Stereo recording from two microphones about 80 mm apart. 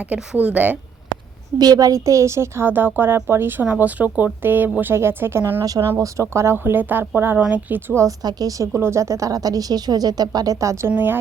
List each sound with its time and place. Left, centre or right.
0.1 s speech: centre
1.5 s a woman's voice: right
8.2 s a woman's voice: right
10.9 s a woman's voice: right